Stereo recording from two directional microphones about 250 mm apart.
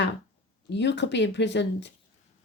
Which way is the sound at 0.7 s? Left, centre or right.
Left.